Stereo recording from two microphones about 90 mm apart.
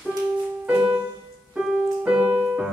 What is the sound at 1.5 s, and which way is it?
Music, 10° right (ahead or behind).